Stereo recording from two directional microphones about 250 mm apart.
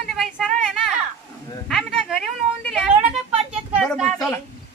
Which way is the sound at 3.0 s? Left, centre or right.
Right.